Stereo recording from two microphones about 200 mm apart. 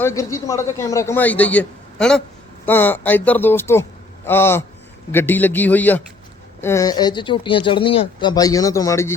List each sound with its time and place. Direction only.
0.0 s a man's voice: 15° left (ahead or behind)